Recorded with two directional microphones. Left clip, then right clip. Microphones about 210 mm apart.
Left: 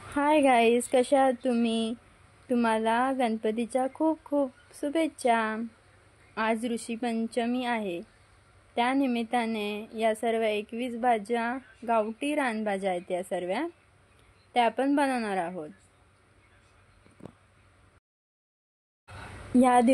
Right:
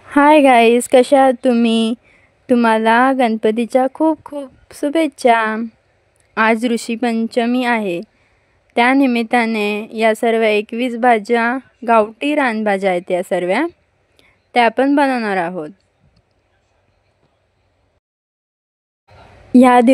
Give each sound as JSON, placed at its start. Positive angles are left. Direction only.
{"t": 0.1, "sound": "a woman's voice", "side_deg": -50}
{"t": 19.5, "sound": "a woman's voice", "side_deg": -50}